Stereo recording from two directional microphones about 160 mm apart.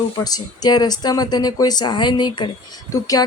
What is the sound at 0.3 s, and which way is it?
Speech, 25° left (ahead or behind).